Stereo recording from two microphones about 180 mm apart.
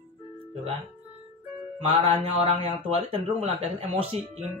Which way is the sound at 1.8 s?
30° right (ahead or behind).